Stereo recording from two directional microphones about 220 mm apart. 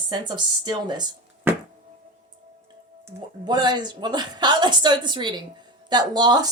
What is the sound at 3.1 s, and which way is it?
Speech, 20° right (ahead or behind).